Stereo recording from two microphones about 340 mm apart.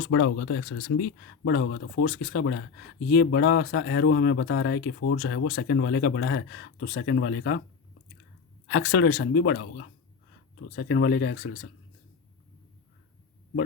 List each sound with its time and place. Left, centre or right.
0.1 s speech: left
8.6 s speech: left